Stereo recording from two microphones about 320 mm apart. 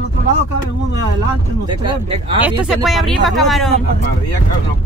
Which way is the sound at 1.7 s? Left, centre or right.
Centre.